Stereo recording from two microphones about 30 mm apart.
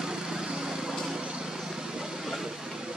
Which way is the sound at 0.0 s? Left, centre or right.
Right.